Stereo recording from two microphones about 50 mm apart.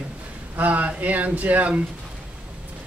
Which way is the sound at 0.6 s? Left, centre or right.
Right.